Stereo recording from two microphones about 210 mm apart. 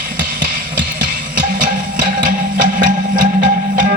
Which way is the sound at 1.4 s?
40° right (ahead or behind).